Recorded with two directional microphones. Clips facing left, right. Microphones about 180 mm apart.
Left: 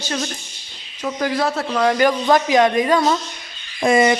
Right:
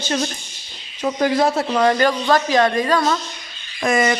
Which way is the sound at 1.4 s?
10° right (ahead or behind).